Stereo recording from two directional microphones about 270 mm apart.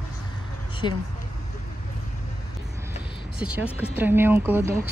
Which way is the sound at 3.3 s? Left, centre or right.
Centre.